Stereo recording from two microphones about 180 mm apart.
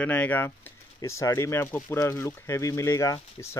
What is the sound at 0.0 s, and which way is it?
Speech, 10° left (ahead or behind).